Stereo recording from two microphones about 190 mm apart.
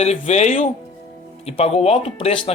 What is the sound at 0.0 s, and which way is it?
Speech, 35° left (ahead or behind).